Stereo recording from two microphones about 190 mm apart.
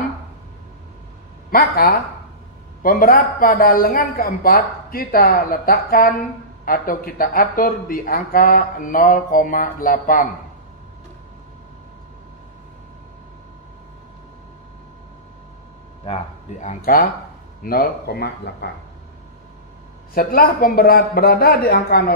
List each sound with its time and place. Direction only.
1.5 s a woman's voice: 50° left (ahead or behind)
16.1 s a woman's voice: 40° left (ahead or behind); by 18.7 s 55° left (ahead or behind)
20.2 s a woman's voice: 50° left (ahead or behind)